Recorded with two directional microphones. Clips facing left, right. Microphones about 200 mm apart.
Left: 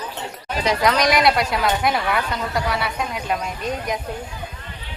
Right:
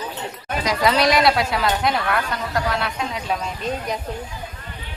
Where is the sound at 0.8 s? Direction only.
5° right (ahead or behind).